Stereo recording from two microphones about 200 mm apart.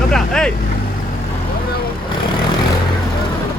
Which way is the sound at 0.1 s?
5° left (ahead or behind).